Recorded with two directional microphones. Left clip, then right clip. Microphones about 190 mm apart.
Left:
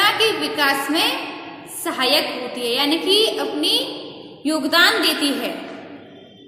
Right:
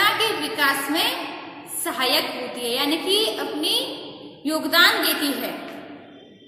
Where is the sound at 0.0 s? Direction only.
15° left (ahead or behind).